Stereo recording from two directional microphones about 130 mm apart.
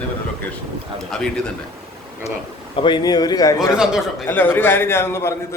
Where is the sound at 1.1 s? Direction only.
5° left (ahead or behind).